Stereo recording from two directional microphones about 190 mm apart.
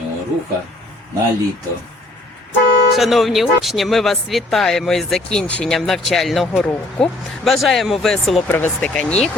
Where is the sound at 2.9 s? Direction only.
Centre (ahead or behind).